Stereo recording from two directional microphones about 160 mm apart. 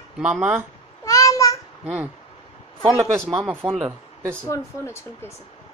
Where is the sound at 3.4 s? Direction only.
10° right (ahead or behind).